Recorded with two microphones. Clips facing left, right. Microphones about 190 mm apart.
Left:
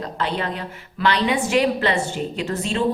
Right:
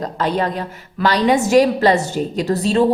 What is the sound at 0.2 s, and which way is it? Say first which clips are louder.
A woman's voice: right 6 dB; 40° right (ahead or behind).